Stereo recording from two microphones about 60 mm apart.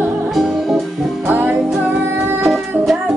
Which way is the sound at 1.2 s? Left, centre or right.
Right.